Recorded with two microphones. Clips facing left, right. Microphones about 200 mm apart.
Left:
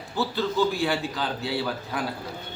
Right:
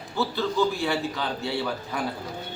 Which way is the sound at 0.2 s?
Centre (ahead or behind).